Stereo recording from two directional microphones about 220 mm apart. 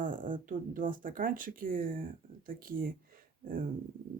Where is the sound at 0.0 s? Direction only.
40° right (ahead or behind).